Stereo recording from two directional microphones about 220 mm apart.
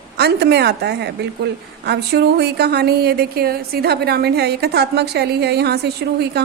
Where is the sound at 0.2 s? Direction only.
45° right (ahead or behind).